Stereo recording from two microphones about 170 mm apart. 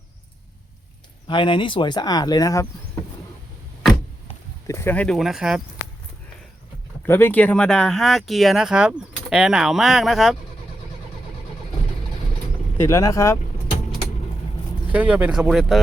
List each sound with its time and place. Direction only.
1.3 s speech: 30° left (ahead or behind)
4.6 s speech: 15° left (ahead or behind); by 5.6 s 5° right (ahead or behind)
7.1 s speech: 10° left (ahead or behind)
12.7 s speech: 15° left (ahead or behind)
14.9 s speech: 10° right (ahead or behind)